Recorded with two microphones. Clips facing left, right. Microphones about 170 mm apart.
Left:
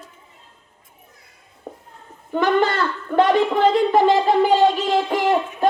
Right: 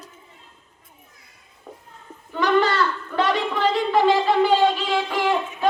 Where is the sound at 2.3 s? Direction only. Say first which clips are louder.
Left 1 dB; 50° left (ahead or behind).